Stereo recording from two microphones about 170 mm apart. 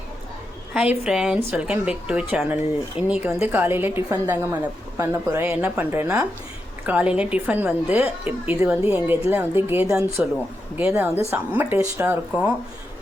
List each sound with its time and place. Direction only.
0.7 s a woman's voice: 5° right (ahead or behind)